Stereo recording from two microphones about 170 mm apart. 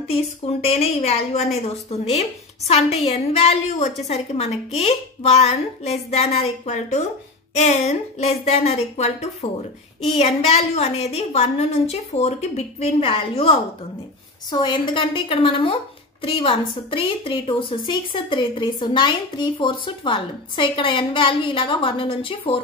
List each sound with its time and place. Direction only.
0.1 s a child's voice: 35° left (ahead or behind)